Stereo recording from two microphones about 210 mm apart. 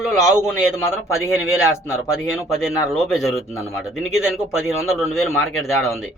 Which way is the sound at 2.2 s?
Centre (ahead or behind).